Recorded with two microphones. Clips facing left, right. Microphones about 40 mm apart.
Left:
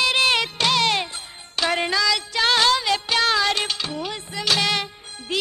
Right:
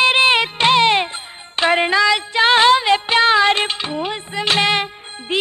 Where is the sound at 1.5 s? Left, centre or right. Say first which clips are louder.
Right 7 dB; right.